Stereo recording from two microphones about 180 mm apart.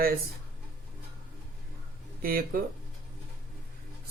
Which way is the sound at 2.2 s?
55° right (ahead or behind).